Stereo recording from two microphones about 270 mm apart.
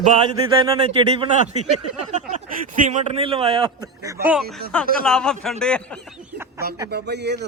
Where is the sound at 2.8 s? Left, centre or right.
Right.